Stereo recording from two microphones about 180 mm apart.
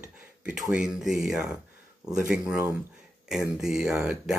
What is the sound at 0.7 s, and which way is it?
Speech, 5° right (ahead or behind).